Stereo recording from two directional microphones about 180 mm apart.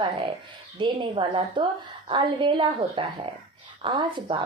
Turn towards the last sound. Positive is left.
turn(degrees=-25)  # may be behind; listen again after turning